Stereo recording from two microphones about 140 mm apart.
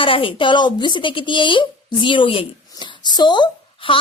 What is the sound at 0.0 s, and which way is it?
A woman's voice, 40° left (ahead or behind).